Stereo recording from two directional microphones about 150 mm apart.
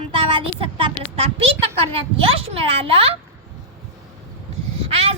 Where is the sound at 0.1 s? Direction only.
35° right (ahead or behind).